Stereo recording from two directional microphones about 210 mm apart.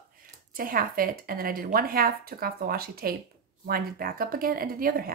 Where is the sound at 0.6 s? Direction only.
45° right (ahead or behind).